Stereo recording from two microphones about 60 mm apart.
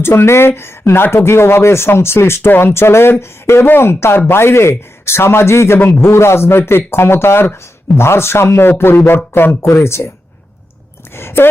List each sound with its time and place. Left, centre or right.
0.0 s a man's voice: left
11.1 s speech: left